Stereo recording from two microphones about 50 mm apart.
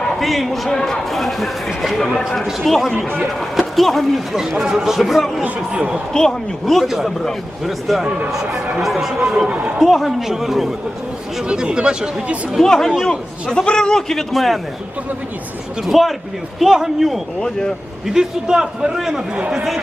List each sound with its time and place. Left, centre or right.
0.2 s speech: centre
4.4 s a man's voice: centre
5.4 s speech: right
6.1 s speech: centre
9.5 s speech: right
9.8 s speech: centre
11.4 s a man's voice: centre
12.5 s a man's voice: centre
15.9 s a man's voice: centre